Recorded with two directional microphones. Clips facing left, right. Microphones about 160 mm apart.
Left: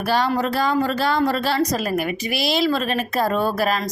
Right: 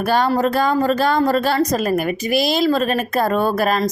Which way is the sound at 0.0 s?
50° right (ahead or behind).